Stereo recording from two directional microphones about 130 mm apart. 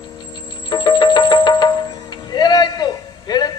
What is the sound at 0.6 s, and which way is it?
Music, 35° left (ahead or behind).